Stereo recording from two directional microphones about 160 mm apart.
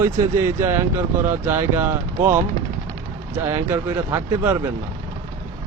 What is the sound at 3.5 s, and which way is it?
Speech, 15° right (ahead or behind).